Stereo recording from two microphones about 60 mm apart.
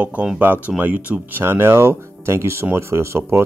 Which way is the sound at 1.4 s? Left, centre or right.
Right.